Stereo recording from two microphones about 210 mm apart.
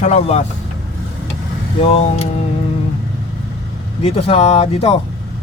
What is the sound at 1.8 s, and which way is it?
Speech, 30° left (ahead or behind).